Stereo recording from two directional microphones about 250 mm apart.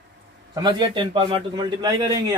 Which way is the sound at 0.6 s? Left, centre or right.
Centre.